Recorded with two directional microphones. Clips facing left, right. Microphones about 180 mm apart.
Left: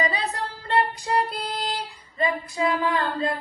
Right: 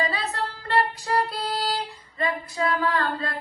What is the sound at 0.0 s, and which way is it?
Music, 15° left (ahead or behind).